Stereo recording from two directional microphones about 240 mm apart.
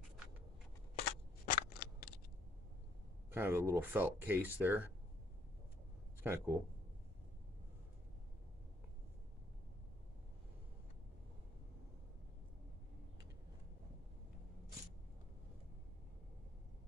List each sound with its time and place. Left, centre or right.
1.4 s scissors: left
3.3 s speech: centre
6.2 s speech: centre